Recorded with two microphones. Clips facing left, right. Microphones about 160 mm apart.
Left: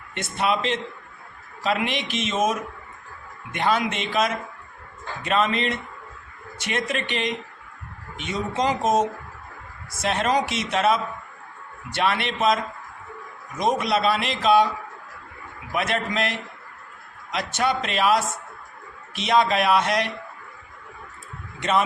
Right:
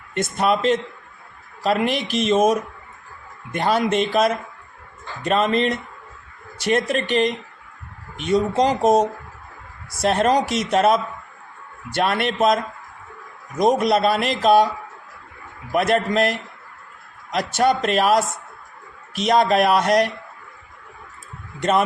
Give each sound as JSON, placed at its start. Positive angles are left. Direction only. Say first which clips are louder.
{"t": 0.1, "sound": "a man's voice", "louder": "right 4 dB", "side_deg": -45}
{"t": 13.6, "sound": "a man's voice", "louder": "right 5 dB", "side_deg": -45}
{"t": 15.7, "sound": "speech", "louder": "right 7 dB", "side_deg": -40}
{"t": 17.3, "sound": "a man's voice", "louder": "right 5 dB", "side_deg": -45}
{"t": 21.6, "sound": "a man's voice", "louder": "right 3 dB", "side_deg": -45}